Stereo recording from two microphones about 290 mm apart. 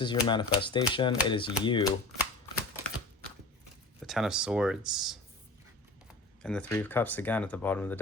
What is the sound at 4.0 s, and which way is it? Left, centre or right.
Speech, centre.